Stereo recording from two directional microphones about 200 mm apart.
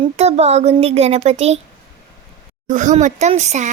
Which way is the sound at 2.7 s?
40° right (ahead or behind).